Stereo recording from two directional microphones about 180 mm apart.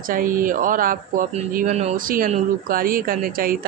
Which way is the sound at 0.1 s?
50° right (ahead or behind).